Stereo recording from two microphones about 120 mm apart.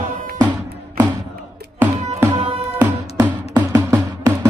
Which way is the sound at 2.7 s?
25° right (ahead or behind).